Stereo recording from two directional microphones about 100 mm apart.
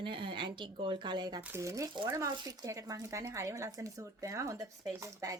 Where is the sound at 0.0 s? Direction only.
60° right (ahead or behind).